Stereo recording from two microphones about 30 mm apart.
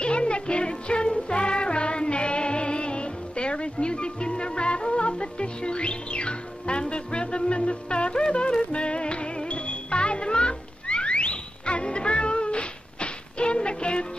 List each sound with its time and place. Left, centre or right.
0.0 s music: left